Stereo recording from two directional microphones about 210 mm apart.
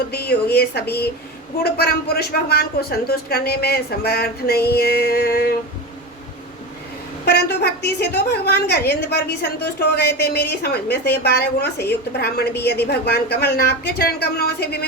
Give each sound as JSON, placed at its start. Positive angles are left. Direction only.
{"t": 0.1, "sound": "a woman's voice", "side_deg": 50}
{"t": 7.3, "sound": "a woman's voice", "side_deg": 50}